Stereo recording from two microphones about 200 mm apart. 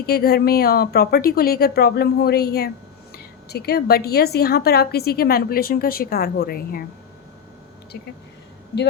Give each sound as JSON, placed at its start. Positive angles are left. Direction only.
{"t": 0.0, "sound": "speech", "side_deg": 50}